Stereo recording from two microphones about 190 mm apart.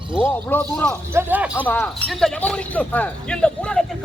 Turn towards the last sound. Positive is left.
turn(degrees=5)  # may be behind; listen again after turning